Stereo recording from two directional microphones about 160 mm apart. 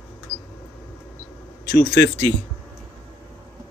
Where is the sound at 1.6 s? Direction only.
90° left.